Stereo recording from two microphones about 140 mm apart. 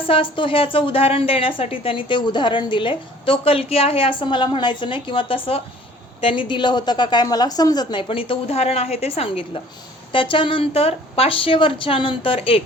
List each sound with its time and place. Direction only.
0.0 s a woman's voice: 40° left (ahead or behind)